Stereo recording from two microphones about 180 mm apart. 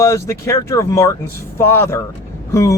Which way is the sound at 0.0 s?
15° left (ahead or behind).